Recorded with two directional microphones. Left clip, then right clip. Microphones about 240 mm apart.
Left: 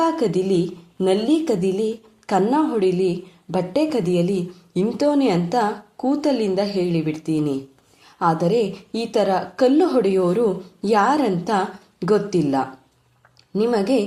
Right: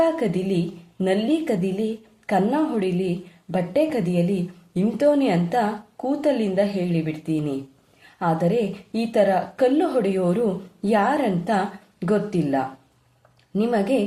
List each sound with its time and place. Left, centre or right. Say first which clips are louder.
1.0 s a woman's voice: left 3 dB; left